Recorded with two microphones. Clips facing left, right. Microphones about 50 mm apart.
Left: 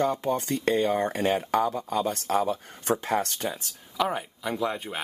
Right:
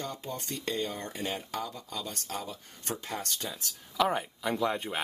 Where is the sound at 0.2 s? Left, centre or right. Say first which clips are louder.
Left 11 dB; left.